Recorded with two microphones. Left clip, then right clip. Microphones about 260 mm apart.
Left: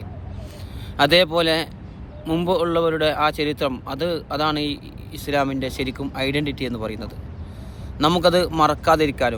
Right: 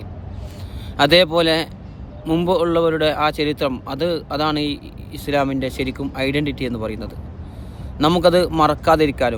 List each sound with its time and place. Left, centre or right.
0.9 s a man's voice: centre